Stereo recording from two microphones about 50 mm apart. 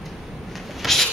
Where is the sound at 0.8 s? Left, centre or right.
Centre.